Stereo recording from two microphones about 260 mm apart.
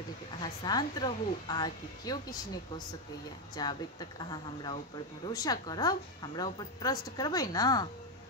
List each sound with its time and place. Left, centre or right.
0.4 s a woman's voice: centre
3.5 s a woman's voice: centre